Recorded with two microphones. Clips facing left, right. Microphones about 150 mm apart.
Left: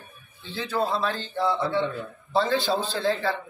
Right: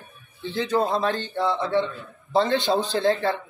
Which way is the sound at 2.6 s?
20° right (ahead or behind).